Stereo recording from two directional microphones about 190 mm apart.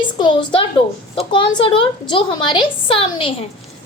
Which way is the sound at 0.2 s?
25° left (ahead or behind).